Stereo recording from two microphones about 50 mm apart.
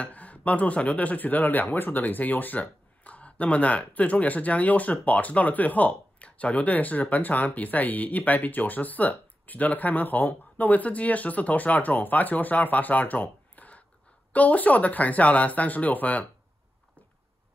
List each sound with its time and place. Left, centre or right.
0.0 s speech: left